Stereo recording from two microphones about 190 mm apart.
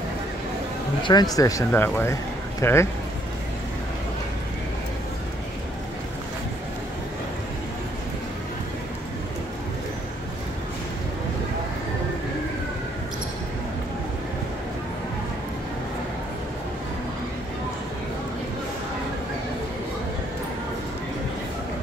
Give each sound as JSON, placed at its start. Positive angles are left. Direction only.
{"t": 1.0, "sound": "speech", "side_deg": 20}